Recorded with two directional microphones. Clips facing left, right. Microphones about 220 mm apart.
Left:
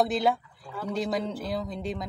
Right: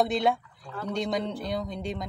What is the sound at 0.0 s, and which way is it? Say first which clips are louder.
Speech: even; centre (ahead or behind).